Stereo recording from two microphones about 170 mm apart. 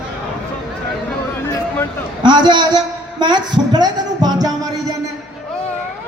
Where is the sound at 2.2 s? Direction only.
25° right (ahead or behind).